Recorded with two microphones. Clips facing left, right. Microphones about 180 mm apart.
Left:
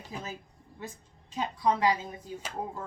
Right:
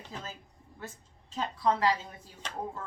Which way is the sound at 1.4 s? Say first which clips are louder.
Left 1 dB; 15° left (ahead or behind).